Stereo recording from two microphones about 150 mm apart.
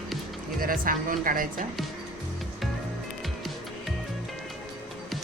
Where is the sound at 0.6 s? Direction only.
70° right (ahead or behind).